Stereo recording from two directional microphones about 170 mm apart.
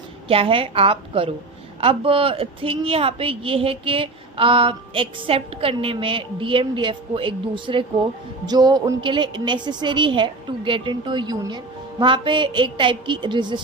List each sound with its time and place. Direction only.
0.3 s a woman's voice: 35° right (ahead or behind)